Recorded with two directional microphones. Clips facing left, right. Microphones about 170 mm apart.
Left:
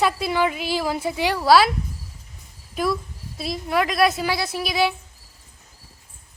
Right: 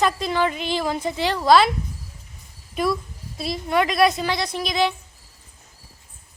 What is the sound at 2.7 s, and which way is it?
A woman's voice, centre (ahead or behind).